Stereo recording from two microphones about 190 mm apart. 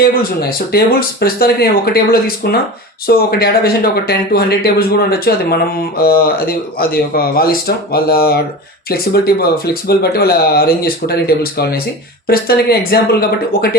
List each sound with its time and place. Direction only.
0.7 s speech: 55° left (ahead or behind)